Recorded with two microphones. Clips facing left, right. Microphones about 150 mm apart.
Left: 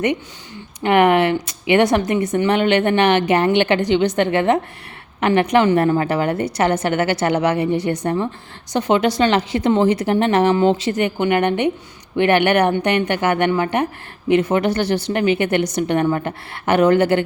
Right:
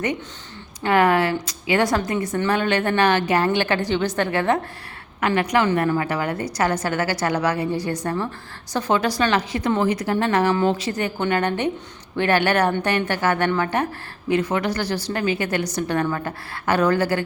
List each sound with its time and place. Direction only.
0.8 s a woman's voice: 20° left (ahead or behind)